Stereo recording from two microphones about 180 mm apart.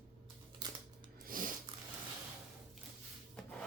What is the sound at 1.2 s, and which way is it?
Snort, 50° right (ahead or behind).